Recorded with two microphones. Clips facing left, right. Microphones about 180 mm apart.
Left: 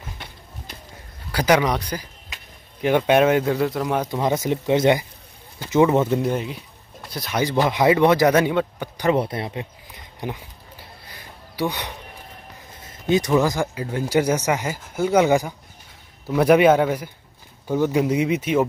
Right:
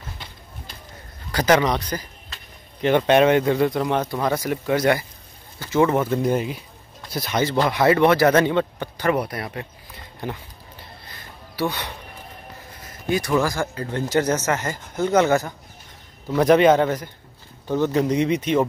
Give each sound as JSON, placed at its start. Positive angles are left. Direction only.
{"t": 1.3, "sound": "speech", "side_deg": 10}
{"t": 4.1, "sound": "speech", "side_deg": 20}
{"t": 6.2, "sound": "speech", "side_deg": 0}
{"t": 7.3, "sound": "speech", "side_deg": 15}
{"t": 9.1, "sound": "speech", "side_deg": 25}
{"t": 10.2, "sound": "a sound", "side_deg": 10}
{"t": 12.8, "sound": "speech", "side_deg": 20}